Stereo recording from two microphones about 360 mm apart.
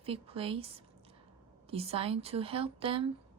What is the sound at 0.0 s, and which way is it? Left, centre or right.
Speech, centre.